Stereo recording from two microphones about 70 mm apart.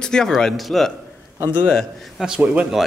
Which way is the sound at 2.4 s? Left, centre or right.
Right.